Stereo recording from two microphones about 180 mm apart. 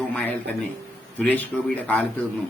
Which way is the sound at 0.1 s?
10° left (ahead or behind).